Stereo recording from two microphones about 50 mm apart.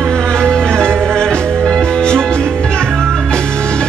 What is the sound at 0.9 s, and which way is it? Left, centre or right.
Music, right.